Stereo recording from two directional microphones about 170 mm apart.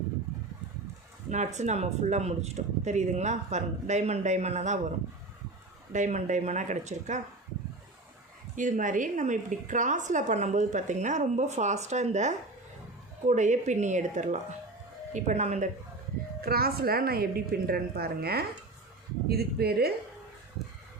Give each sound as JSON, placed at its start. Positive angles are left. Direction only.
{"t": 1.3, "sound": "a woman's voice", "side_deg": -45}
{"t": 5.9, "sound": "a woman's voice", "side_deg": -45}
{"t": 8.5, "sound": "a woman's voice", "side_deg": -50}
{"t": 16.4, "sound": "a woman's voice", "side_deg": -65}